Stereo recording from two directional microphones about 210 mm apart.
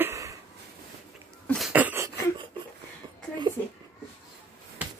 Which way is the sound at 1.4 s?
Centre (ahead or behind).